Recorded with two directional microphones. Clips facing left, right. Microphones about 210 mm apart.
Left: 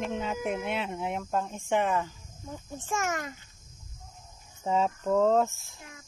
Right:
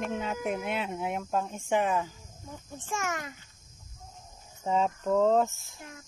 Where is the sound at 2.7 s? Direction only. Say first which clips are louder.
Left 2 dB; 45° left (ahead or behind).